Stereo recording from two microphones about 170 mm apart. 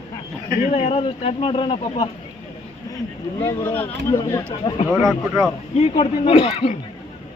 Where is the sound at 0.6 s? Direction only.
40° left (ahead or behind).